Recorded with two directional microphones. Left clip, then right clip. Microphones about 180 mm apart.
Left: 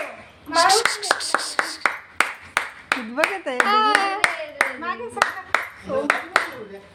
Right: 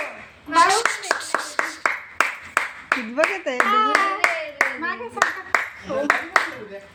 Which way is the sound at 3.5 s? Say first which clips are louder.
Left 1 dB; 40° left (ahead or behind).